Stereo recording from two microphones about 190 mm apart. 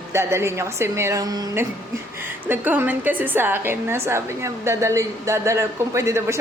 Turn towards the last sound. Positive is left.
turn(degrees=-15)  # may be behind; listen again after turning